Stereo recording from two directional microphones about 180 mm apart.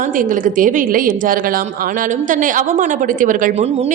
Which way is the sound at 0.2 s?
50° right (ahead or behind).